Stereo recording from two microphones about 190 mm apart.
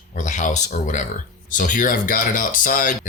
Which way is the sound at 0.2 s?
40° left (ahead or behind).